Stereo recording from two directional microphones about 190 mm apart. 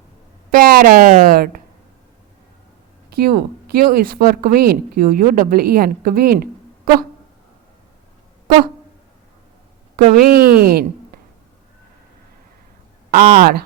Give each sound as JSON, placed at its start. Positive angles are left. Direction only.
{"t": 0.5, "sound": "speech", "side_deg": -50}
{"t": 3.1, "sound": "speech", "side_deg": -55}
{"t": 10.2, "sound": "a woman's voice", "side_deg": -50}
{"t": 13.1, "sound": "speech", "side_deg": -50}